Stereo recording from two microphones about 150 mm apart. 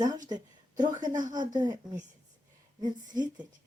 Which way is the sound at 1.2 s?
60° right (ahead or behind).